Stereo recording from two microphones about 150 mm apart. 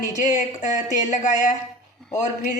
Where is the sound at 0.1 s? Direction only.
55° left (ahead or behind).